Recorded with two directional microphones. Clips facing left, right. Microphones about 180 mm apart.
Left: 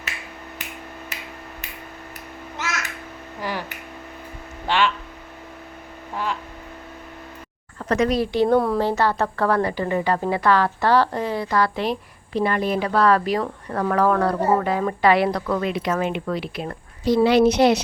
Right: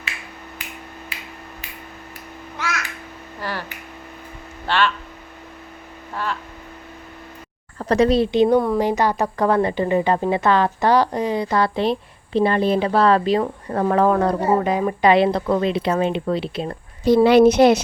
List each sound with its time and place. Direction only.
3.4 s a sound: 15° left (ahead or behind)
4.6 s speech: 15° left (ahead or behind)
7.8 s speech: 35° right (ahead or behind)
8.5 s a woman's voice: centre (ahead or behind)
8.8 s a woman's voice: 15° right (ahead or behind)
17.0 s speech: 55° right (ahead or behind)